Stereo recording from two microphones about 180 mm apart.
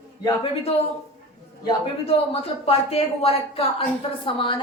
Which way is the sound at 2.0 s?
35° left (ahead or behind).